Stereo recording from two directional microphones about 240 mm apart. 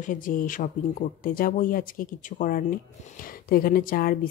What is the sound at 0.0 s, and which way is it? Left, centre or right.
Speech, left.